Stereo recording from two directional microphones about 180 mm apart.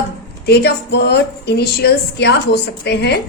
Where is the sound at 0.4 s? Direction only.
65° left (ahead or behind).